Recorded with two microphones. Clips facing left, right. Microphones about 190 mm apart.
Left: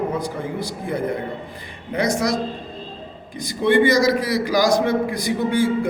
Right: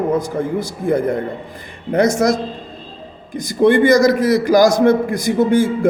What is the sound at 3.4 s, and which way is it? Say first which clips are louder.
A man's voice: right 5 dB; 45° right (ahead or behind).